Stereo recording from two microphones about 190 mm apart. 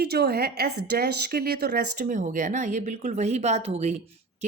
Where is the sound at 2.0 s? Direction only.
40° right (ahead or behind).